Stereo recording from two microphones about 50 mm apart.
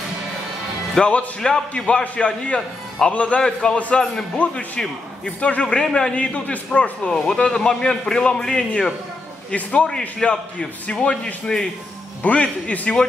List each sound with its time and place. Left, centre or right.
1.0 s a man's voice: centre
3.3 s a man's voice: centre
3.7 s a man's voice: left